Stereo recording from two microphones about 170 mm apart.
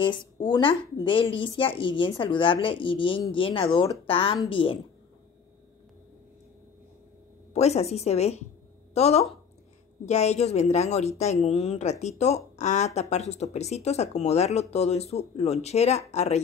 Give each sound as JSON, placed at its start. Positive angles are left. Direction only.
{"t": 0.0, "sound": "speech", "side_deg": 30}
{"t": 7.5, "sound": "speech", "side_deg": 40}